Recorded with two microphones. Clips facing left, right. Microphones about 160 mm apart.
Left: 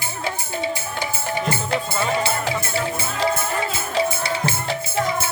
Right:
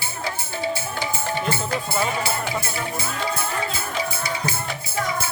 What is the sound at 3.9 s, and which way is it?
Music, 30° left (ahead or behind).